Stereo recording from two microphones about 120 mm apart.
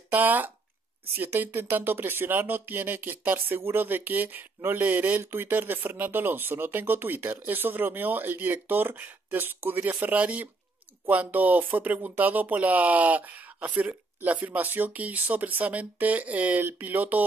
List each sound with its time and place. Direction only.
0.1 s speech: 15° right (ahead or behind)